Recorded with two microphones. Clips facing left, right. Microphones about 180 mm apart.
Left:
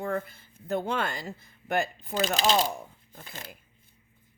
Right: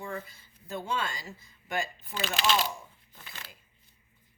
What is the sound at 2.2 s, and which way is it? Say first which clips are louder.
Speech: left 4 dB; 40° left (ahead or behind).